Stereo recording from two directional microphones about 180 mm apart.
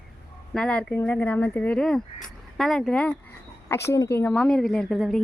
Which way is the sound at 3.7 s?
15° left (ahead or behind).